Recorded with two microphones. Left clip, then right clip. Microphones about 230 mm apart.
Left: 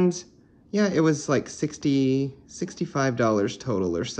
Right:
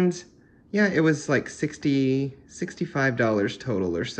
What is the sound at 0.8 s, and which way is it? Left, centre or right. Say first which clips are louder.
Speech: right 1 dB; centre.